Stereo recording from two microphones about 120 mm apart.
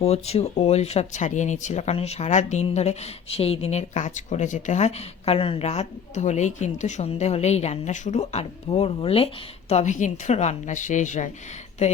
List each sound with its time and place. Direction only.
0.0 s speech: 60° left (ahead or behind); by 2.6 s 80° left
2.6 s speech: 65° left (ahead or behind)
9.0 s a woman's voice: 50° left (ahead or behind); by 11.3 s 90° left